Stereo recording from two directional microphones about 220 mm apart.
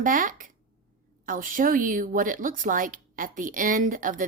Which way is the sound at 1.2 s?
40° right (ahead or behind).